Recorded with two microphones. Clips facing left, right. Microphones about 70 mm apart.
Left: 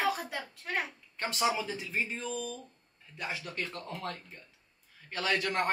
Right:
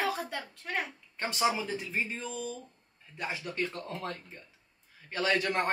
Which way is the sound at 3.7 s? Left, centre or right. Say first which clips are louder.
Right 1 dB; right.